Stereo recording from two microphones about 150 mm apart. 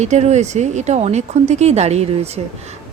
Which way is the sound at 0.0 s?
50° right (ahead or behind).